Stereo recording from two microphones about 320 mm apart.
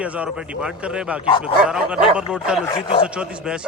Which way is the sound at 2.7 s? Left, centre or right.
Centre.